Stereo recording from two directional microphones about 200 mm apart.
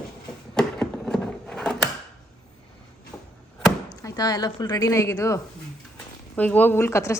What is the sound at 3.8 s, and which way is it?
A woman's voice, 20° left (ahead or behind).